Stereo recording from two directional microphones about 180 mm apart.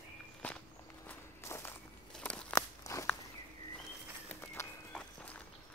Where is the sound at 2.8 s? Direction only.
15° left (ahead or behind).